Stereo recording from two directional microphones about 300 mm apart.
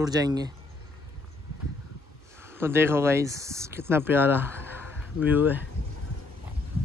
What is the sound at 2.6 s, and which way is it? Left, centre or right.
Speech, centre.